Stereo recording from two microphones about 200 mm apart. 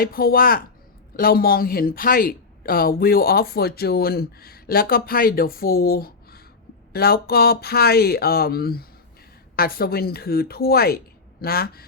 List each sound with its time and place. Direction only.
0.0 s a woman's voice: 45° left (ahead or behind)